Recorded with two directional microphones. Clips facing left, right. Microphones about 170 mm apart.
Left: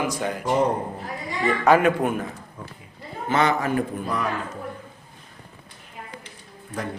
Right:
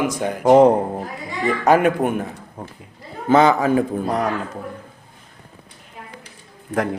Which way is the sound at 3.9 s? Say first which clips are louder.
Right 6 dB; 40° right (ahead or behind).